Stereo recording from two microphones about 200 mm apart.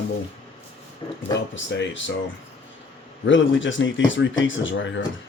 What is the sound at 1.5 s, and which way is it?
Speech, 65° left (ahead or behind).